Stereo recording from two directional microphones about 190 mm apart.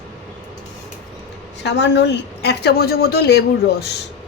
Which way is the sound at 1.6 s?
65° left (ahead or behind).